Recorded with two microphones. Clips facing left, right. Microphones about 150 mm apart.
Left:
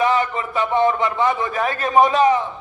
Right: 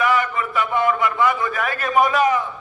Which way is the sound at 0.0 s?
25° left (ahead or behind).